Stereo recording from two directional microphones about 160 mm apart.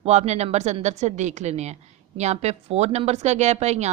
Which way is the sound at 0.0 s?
45° right (ahead or behind).